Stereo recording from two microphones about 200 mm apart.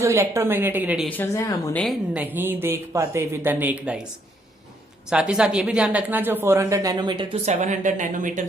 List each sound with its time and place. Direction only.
0.0 s speech: 15° right (ahead or behind)
1.0 s speech: 10° left (ahead or behind)
1.8 s speech: 5° right (ahead or behind)
5.0 s speech: 5° right (ahead or behind); by 7.5 s 25° right (ahead or behind)
7.5 s speech: 35° right (ahead or behind)